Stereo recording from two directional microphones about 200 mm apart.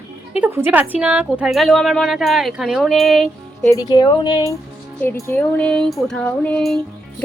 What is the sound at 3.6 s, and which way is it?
Speech, 15° left (ahead or behind).